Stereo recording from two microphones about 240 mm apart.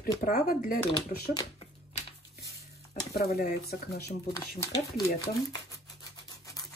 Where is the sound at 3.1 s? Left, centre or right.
Left.